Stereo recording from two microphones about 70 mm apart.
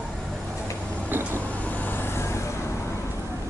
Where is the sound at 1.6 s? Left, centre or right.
Left.